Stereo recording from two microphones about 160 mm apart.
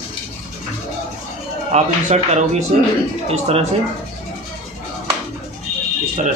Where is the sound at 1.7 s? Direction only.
45° right (ahead or behind).